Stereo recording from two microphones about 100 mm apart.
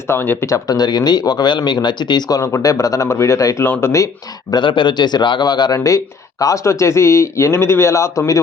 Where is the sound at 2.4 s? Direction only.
30° left (ahead or behind).